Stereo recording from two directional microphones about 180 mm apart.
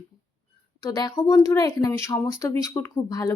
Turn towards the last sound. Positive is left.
turn(degrees=20)  # may be behind; listen again after turning